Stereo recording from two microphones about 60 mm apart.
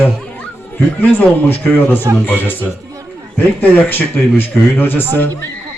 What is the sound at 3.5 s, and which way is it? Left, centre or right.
A man's voice, left.